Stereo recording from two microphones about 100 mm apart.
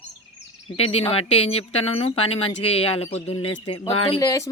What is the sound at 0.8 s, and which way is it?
Speech, 80° left.